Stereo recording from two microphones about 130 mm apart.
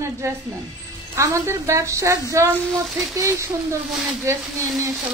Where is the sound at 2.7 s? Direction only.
Centre (ahead or behind).